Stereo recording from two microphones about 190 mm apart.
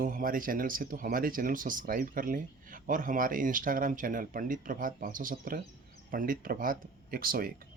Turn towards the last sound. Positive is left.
turn(degrees=-50)  # may be behind; listen again after turning